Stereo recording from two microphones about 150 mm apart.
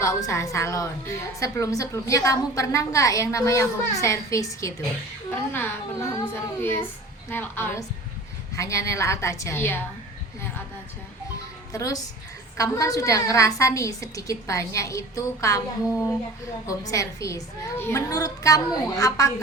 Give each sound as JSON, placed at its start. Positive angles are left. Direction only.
{"t": 0.0, "sound": "a woman's voice", "side_deg": 20}
{"t": 11.7, "sound": "a woman's voice", "side_deg": 25}